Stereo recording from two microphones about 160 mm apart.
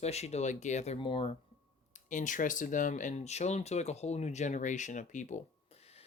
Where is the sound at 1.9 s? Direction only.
50° left (ahead or behind).